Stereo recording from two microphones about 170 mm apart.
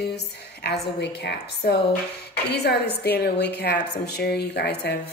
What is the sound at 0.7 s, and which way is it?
A woman's voice, 70° left (ahead or behind).